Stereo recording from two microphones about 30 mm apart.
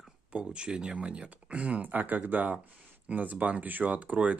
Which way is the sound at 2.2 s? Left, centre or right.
Right.